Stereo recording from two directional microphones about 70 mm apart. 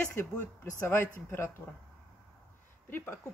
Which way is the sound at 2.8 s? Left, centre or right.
Left.